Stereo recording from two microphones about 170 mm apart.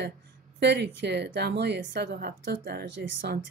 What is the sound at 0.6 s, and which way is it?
A woman's voice, 80° right.